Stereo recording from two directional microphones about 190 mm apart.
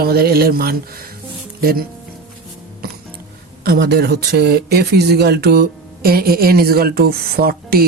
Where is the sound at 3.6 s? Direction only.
55° right (ahead or behind).